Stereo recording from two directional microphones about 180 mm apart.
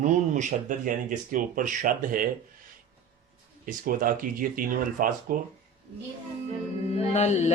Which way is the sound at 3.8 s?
50° right (ahead or behind).